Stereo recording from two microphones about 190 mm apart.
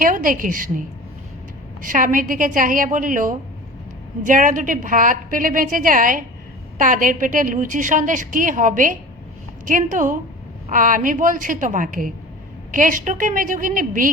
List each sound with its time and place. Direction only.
0.0 s a woman's voice: 45° right (ahead or behind)